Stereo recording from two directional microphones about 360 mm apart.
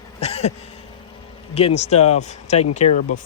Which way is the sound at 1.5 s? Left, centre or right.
Centre.